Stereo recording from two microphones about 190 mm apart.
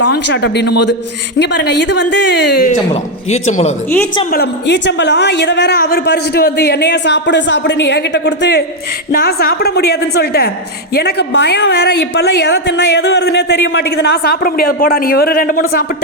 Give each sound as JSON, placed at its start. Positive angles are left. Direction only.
{"t": 0.0, "sound": "a woman's voice", "side_deg": 65}
{"t": 2.9, "sound": "a man's voice", "side_deg": 35}
{"t": 4.3, "sound": "a woman's voice", "side_deg": 60}
{"t": 9.1, "sound": "a woman's voice", "side_deg": 50}